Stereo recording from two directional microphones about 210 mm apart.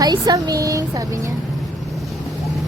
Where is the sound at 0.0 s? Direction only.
20° right (ahead or behind).